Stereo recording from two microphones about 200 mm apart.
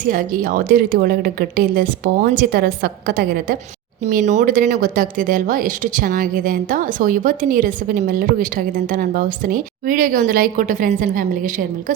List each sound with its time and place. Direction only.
0.0 s speech: 45° right (ahead or behind)
4.0 s speech: 35° right (ahead or behind)